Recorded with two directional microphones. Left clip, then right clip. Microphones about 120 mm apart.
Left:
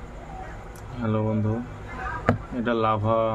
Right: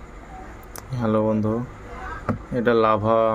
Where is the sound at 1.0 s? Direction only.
45° right (ahead or behind).